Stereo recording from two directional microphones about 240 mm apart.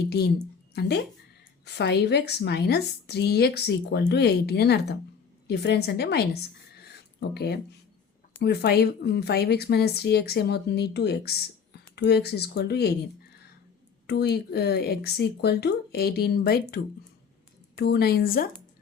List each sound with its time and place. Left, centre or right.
0.7 s a woman's voice: left
14.1 s a woman's voice: left